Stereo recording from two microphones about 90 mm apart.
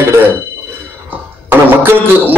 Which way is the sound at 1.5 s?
20° right (ahead or behind).